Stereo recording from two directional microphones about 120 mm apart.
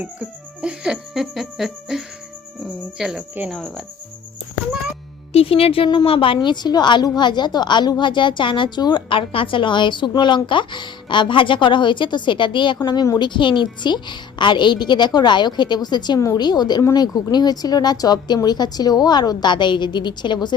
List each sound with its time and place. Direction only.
0.0 s music: 10° right (ahead or behind)
5.3 s a woman's voice: 55° left (ahead or behind); by 20.5 s 40° left (ahead or behind)